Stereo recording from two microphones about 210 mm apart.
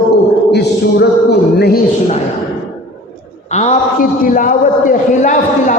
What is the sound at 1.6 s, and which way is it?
Speech, 50° left (ahead or behind).